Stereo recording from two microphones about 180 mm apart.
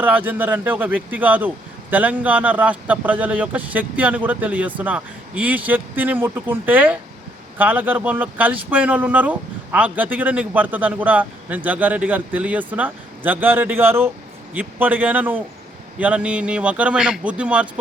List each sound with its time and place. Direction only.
0.0 s speech: 10° right (ahead or behind)